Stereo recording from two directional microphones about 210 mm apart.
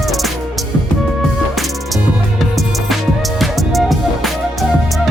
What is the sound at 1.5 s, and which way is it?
Music, centre (ahead or behind).